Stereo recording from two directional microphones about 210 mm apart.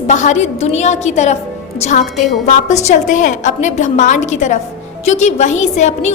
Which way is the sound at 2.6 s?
35° left (ahead or behind).